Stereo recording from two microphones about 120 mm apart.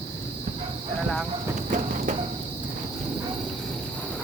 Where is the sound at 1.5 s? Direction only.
90° right.